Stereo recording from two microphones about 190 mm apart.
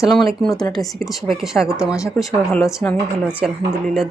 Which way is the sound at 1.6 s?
15° left (ahead or behind).